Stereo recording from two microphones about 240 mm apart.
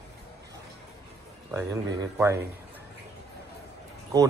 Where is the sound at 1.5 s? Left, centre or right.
Centre.